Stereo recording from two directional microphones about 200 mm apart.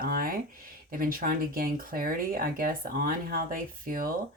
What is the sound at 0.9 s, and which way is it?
Speech, 45° right (ahead or behind).